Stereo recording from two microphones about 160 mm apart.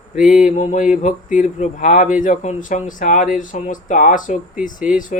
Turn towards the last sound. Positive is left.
turn(degrees=55)  # may be behind; listen again after turning